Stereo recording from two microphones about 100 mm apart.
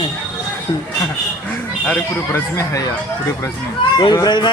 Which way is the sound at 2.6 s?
35° left (ahead or behind).